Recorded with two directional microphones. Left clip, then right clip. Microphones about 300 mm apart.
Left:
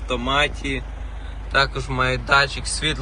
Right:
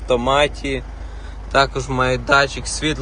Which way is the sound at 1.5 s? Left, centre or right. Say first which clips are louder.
Right 3 dB; centre.